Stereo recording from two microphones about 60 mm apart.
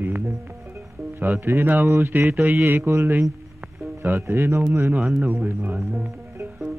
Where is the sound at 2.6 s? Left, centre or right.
Right.